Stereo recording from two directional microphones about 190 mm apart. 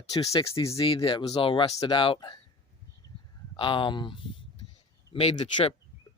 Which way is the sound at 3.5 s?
25° left (ahead or behind).